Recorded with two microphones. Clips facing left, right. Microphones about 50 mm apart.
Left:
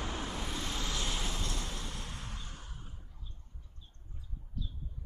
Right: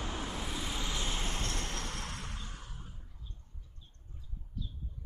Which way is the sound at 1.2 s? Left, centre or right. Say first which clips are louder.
Right 1 dB; right.